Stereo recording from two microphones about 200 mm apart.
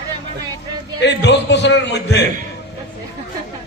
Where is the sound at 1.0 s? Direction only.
60° left (ahead or behind).